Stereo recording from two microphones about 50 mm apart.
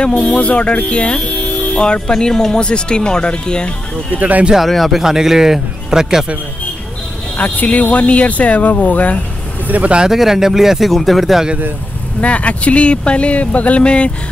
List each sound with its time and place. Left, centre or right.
0.0 s speech: left
4.2 s speech: right
4.6 s speech: centre
7.3 s speech: left
9.7 s speech: right
9.9 s speech: centre
12.2 s speech: left